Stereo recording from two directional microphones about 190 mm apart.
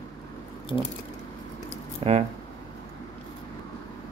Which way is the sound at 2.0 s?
30° right (ahead or behind).